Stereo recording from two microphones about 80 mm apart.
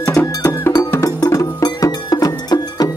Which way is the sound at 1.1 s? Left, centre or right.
Left.